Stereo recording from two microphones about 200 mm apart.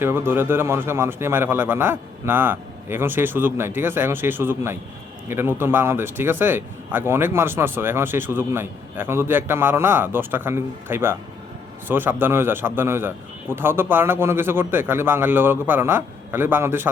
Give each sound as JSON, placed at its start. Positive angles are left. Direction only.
{"t": 0.0, "sound": "speech", "side_deg": -10}